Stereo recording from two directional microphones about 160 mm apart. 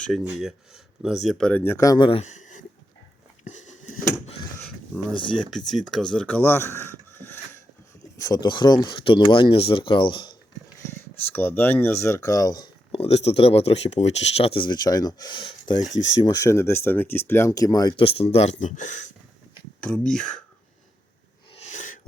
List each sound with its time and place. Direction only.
0.0 s speech: centre (ahead or behind); by 2.0 s 20° left (ahead or behind)
2.0 s speech: 40° left (ahead or behind)
3.4 s a sound: 50° left (ahead or behind)
5.4 s speech: centre (ahead or behind)
8.2 s speech: 25° left (ahead or behind)
11.3 s speech: 10° left (ahead or behind); by 19.1 s 50° left (ahead or behind)
19.8 s speech: 5° left (ahead or behind)
21.5 s a sound: 45° left (ahead or behind)